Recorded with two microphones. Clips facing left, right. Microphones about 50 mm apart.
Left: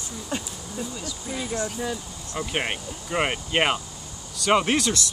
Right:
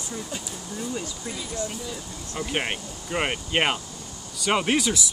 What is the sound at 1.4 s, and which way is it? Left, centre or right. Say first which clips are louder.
Speech: left 4 dB; left.